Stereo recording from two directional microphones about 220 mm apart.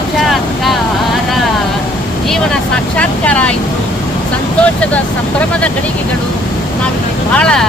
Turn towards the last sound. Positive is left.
turn(degrees=5)  # may be behind; listen again after turning